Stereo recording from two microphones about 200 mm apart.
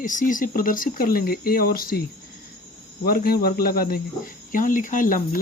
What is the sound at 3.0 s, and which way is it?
Speech, 50° left (ahead or behind).